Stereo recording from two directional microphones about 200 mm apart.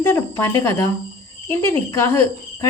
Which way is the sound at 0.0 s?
10° left (ahead or behind).